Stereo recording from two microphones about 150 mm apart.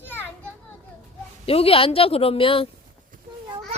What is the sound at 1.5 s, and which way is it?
Speech, 40° left (ahead or behind).